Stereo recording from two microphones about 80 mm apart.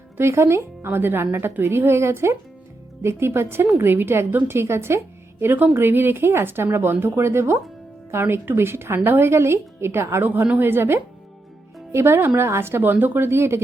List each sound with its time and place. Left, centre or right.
0.2 s a woman's voice: right
10.2 s a woman's voice: right